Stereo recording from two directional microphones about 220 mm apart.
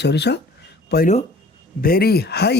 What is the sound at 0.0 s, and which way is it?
Speech, 50° left (ahead or behind).